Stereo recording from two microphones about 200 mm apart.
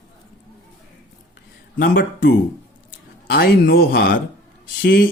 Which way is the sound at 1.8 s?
55° left (ahead or behind).